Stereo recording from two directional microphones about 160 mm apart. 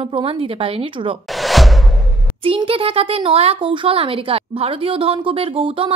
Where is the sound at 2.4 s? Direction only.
35° right (ahead or behind).